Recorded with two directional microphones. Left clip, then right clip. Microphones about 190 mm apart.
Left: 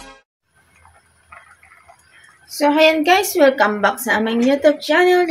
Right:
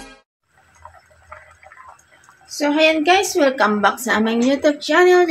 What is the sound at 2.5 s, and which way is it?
A woman's voice, 10° left (ahead or behind).